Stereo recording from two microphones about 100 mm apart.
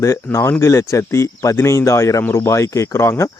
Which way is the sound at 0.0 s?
30° left (ahead or behind).